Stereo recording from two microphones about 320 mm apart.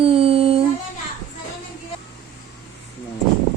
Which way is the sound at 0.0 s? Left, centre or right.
Centre.